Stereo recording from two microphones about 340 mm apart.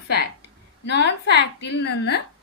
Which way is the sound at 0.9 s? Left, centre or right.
Left.